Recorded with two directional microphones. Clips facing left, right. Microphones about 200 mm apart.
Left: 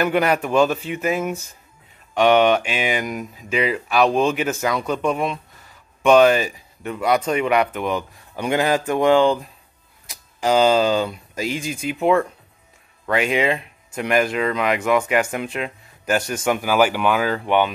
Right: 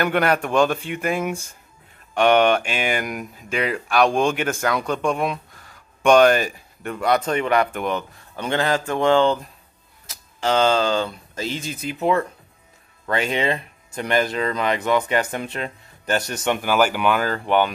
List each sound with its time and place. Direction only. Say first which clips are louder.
0.0 s speech: left 1 dB; 5° left (ahead or behind)
11.5 s speech: left 3 dB; 35° right (ahead or behind)
13.0 s speech: left 3 dB; 5° left (ahead or behind)